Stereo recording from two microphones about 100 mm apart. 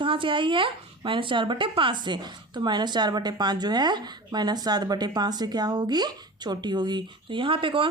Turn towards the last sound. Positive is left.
turn(degrees=-60)  # may be behind; listen again after turning